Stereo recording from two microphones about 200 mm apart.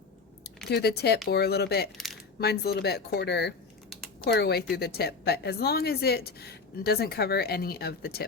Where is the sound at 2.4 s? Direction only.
55° left (ahead or behind).